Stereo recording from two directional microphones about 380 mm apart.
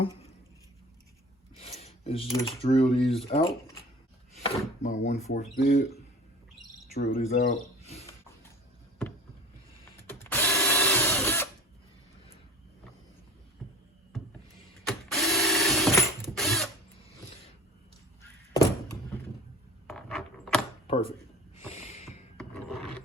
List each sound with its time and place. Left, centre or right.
1.5 s speech: centre
7.9 s a sound: centre
10.0 s tools: centre
14.8 s mechanisms: centre
19.9 s keys jangling: centre
20.8 s a sound: centre
22.4 s filing: centre